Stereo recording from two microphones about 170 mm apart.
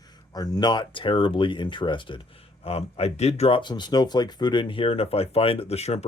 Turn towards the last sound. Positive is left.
turn(degrees=40)  # may be behind; listen again after turning